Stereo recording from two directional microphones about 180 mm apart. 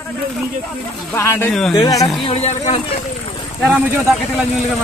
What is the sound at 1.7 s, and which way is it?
Speech, 20° left (ahead or behind).